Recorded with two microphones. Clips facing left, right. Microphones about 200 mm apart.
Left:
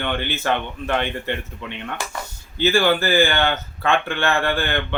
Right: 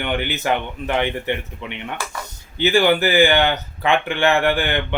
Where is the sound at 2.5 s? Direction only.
15° right (ahead or behind).